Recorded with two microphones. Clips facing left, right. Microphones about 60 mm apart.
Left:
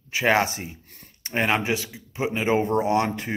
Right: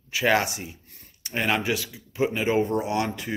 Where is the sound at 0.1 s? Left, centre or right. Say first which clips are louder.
Left 1 dB; left.